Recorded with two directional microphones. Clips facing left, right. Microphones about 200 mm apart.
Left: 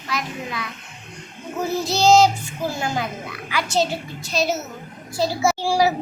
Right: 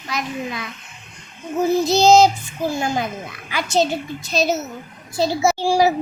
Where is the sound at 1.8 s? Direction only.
20° right (ahead or behind).